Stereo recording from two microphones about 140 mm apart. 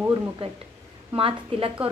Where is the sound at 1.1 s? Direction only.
40° right (ahead or behind).